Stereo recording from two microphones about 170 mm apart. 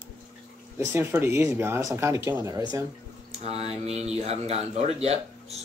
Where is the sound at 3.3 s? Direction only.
40° right (ahead or behind).